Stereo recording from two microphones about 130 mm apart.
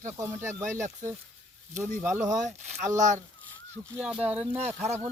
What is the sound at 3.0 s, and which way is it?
Speech, 70° right (ahead or behind).